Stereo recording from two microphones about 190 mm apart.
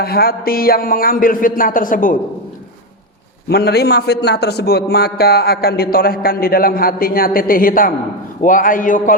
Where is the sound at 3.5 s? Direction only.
55° left (ahead or behind).